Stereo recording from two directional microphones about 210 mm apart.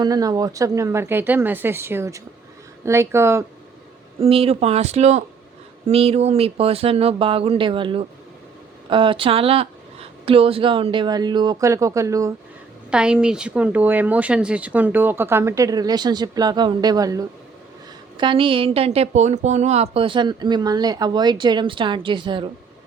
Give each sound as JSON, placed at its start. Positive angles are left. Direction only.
{"t": 0.0, "sound": "speech", "side_deg": -15}
{"t": 4.2, "sound": "a woman's voice", "side_deg": -25}
{"t": 12.9, "sound": "a woman's voice", "side_deg": -5}